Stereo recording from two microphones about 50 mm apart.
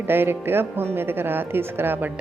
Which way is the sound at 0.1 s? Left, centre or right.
Right.